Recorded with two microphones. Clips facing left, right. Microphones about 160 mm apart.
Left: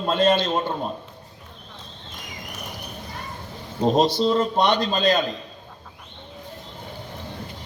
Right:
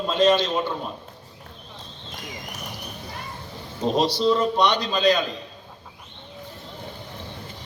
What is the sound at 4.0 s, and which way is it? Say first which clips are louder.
A man's voice: even; 50° left (ahead or behind).